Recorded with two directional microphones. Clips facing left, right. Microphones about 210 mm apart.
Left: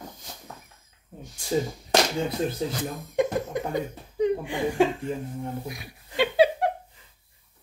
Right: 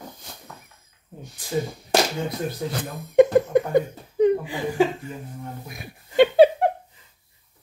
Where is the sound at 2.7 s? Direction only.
60° right (ahead or behind).